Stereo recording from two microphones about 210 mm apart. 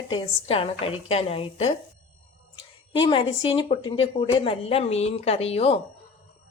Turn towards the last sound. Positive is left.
turn(degrees=30)  # may be behind; listen again after turning